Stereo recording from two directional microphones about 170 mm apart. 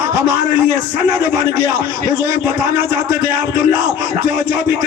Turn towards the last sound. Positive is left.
turn(degrees=-15)  # may be behind; listen again after turning